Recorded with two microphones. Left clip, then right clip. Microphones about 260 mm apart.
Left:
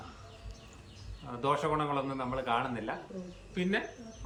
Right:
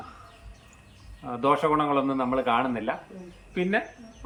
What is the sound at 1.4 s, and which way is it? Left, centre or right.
A man's voice, right.